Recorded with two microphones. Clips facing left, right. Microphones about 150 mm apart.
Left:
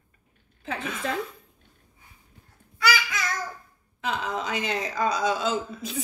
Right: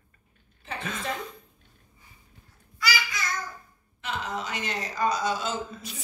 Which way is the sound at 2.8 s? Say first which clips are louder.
Left 5 dB; 60° left (ahead or behind).